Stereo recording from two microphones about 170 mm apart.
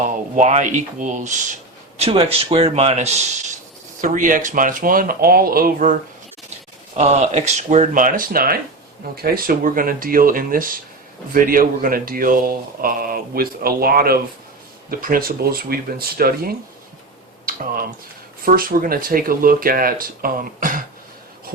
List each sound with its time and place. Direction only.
0.1 s speech: 40° right (ahead or behind)
2.0 s speech: 35° right (ahead or behind); by 6.0 s 55° right (ahead or behind)
6.9 s speech: 40° right (ahead or behind); by 16.6 s 60° right (ahead or behind)
17.4 s typing: 55° right (ahead or behind)
18.4 s speech: 55° right (ahead or behind)